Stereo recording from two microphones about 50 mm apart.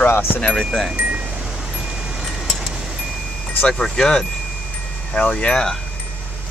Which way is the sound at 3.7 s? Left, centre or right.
Centre.